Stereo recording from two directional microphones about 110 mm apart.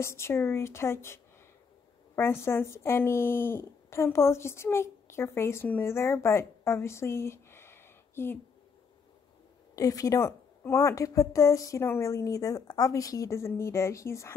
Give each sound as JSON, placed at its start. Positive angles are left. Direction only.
{"t": 0.0, "sound": "a woman's voice", "side_deg": 25}
{"t": 9.8, "sound": "a woman's voice", "side_deg": 35}